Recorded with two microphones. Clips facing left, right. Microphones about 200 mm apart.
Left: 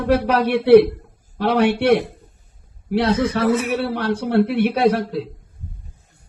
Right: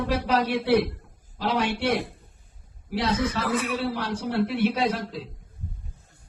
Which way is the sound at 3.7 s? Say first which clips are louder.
Left 7 dB; 60° left (ahead or behind).